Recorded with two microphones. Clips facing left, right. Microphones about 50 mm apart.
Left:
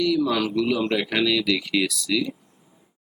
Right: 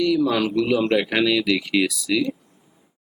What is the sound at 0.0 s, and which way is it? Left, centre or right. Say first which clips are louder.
Speech: right 2 dB; centre.